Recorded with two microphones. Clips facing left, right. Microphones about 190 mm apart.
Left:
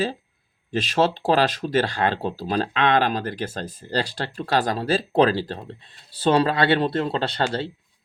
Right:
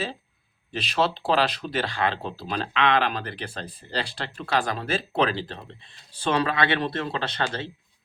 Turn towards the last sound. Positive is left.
turn(degrees=30)  # may be behind; listen again after turning